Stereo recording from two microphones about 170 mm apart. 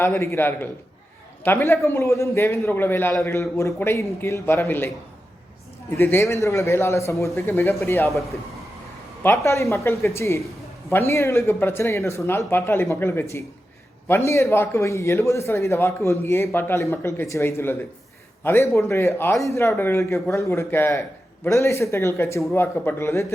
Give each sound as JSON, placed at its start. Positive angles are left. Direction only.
{"t": 0.0, "sound": "a man's voice", "side_deg": 15}
{"t": 6.0, "sound": "a man's voice", "side_deg": 15}
{"t": 9.2, "sound": "a man's voice", "side_deg": 15}